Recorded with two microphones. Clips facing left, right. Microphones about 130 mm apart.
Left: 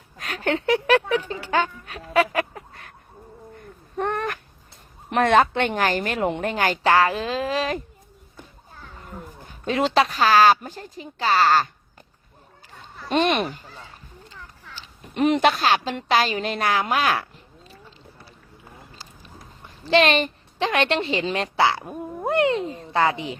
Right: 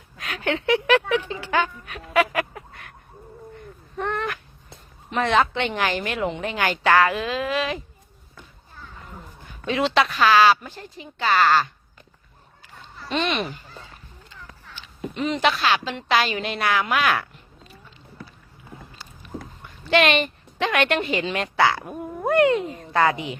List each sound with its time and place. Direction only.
0.2 s a woman's voice: 40° left (ahead or behind)
2.3 s fowl: 30° left (ahead or behind)
3.9 s cat: 50° left (ahead or behind)
5.1 s a woman's voice: 50° left (ahead or behind)
9.5 s a woman's voice: 40° left (ahead or behind)
13.1 s a woman's voice: 50° left (ahead or behind)
15.1 s a woman's voice: 55° left (ahead or behind); by 17.2 s 35° left (ahead or behind)
19.8 s a woman's voice: 35° left (ahead or behind)